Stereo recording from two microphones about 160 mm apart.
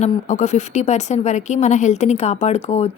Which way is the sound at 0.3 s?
45° left (ahead or behind).